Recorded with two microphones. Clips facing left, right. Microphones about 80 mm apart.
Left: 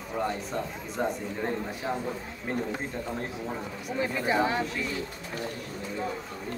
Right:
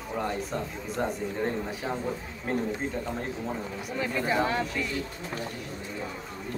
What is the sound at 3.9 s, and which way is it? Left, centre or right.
Speech, centre.